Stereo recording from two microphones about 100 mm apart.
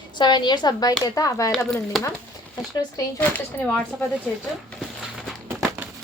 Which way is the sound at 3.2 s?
15° left (ahead or behind).